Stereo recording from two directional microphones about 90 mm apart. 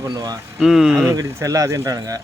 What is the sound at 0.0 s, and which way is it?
Speech, 35° right (ahead or behind).